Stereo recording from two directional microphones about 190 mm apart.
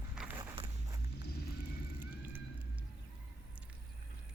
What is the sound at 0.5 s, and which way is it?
Walk, 25° right (ahead or behind).